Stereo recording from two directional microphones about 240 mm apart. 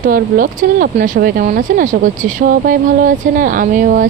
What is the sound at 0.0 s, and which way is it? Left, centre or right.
Speech, right.